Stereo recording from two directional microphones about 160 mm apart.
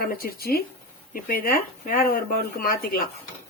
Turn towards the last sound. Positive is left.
turn(degrees=70)  # may be behind; listen again after turning